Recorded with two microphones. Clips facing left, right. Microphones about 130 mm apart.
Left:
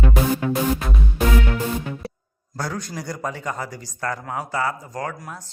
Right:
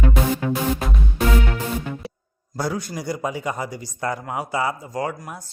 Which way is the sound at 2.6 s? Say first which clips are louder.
Right 3 dB; 10° right (ahead or behind).